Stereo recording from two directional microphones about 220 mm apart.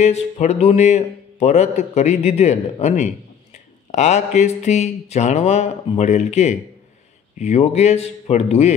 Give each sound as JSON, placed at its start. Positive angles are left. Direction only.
{"t": 0.0, "sound": "speech", "side_deg": 30}